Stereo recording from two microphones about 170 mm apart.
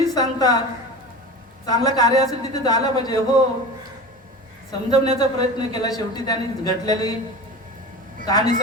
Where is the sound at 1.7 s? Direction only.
25° left (ahead or behind).